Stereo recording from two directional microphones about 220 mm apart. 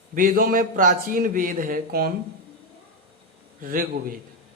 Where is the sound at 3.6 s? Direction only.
40° right (ahead or behind).